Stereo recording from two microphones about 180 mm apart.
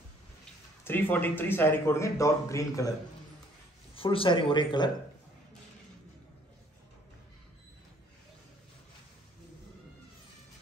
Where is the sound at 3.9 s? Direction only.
30° left (ahead or behind).